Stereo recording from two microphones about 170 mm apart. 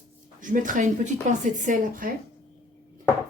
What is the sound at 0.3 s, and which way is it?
Speech, 50° right (ahead or behind).